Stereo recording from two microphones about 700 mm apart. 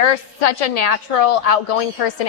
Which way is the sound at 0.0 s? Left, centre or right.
Left.